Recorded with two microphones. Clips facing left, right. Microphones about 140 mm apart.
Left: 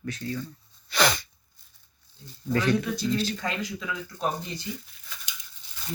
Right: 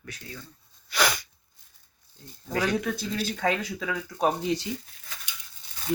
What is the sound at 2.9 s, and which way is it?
Speech, 55° right (ahead or behind).